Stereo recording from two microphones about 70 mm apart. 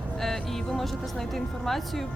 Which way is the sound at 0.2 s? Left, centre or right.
Centre.